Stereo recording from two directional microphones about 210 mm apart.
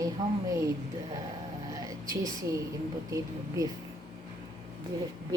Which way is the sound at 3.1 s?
15° right (ahead or behind).